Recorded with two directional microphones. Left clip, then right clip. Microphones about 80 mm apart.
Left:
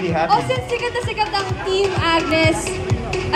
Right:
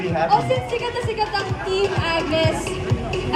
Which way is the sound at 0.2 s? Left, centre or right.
Left.